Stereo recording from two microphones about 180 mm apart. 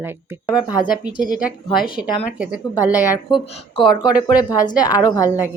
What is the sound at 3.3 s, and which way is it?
A woman's voice, 25° left (ahead or behind).